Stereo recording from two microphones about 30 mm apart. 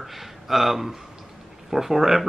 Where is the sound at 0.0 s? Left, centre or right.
Centre.